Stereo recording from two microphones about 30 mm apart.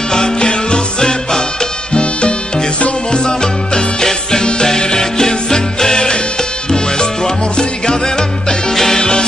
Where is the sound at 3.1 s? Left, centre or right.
Left.